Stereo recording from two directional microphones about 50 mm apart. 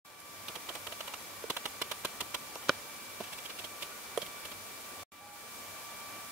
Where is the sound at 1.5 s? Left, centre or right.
Right.